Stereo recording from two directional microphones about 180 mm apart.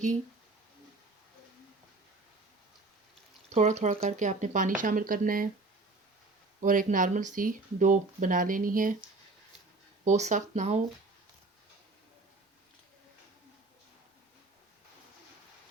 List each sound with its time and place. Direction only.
3.5 s speech: 40° right (ahead or behind)
6.6 s speech: 45° right (ahead or behind)
10.0 s speech: 40° right (ahead or behind)